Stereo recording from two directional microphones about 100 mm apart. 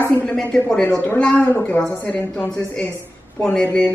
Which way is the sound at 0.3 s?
10° left (ahead or behind).